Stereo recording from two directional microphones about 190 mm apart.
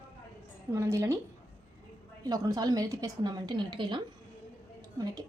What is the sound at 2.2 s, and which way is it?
A woman's voice, 20° right (ahead or behind).